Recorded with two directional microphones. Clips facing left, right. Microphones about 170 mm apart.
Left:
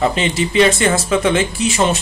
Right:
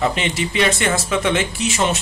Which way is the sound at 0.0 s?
30° left (ahead or behind).